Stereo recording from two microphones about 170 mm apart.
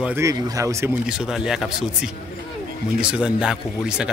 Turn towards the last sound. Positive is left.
turn(degrees=-5)  # may be behind; listen again after turning